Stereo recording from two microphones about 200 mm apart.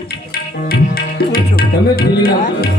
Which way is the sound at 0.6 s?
50° left (ahead or behind).